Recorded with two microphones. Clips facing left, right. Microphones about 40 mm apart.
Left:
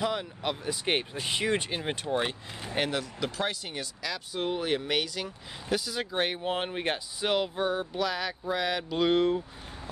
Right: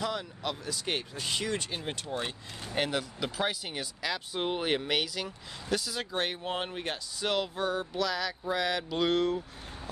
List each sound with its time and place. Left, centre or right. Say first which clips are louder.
0.0 s speech: left 3 dB; left
2.6 s speech: left 1 dB; centre
2.9 s speech: left 1 dB; centre
4.0 s speech: even; centre
4.8 s speech: left 1 dB; centre